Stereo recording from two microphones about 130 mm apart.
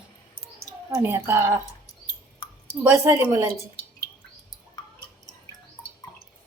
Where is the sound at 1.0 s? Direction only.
20° right (ahead or behind).